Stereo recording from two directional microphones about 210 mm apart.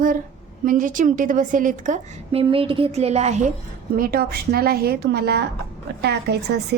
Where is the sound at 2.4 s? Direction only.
25° right (ahead or behind).